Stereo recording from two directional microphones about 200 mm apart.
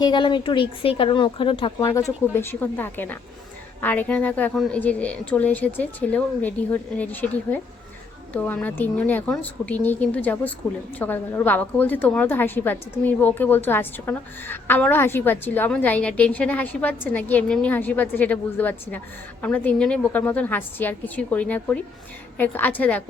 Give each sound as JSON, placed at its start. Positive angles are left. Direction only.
{"t": 0.0, "sound": "speech", "side_deg": 25}
{"t": 2.3, "sound": "a woman's voice", "side_deg": 10}